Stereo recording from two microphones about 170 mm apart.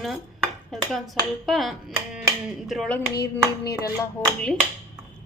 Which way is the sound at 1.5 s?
Centre (ahead or behind).